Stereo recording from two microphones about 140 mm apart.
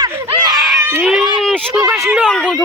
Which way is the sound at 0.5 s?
Centre (ahead or behind).